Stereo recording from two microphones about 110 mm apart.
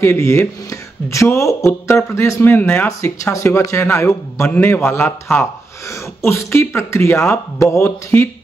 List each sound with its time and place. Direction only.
0.0 s speech: 25° left (ahead or behind)